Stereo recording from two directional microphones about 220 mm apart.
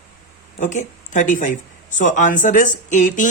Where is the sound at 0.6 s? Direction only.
35° left (ahead or behind).